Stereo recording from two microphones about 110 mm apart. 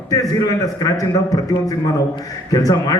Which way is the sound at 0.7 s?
35° left (ahead or behind).